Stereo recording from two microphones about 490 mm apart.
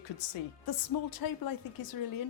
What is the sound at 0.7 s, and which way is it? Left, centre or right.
A woman's voice, left.